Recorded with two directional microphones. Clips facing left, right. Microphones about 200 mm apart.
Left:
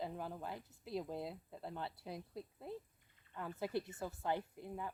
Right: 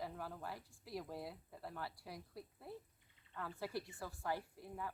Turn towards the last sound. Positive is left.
turn(degrees=20)  # may be behind; listen again after turning